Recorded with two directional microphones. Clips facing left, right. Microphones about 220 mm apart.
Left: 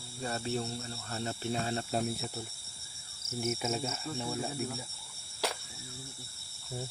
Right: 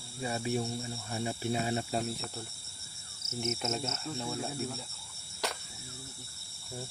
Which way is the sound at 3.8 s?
5° left (ahead or behind).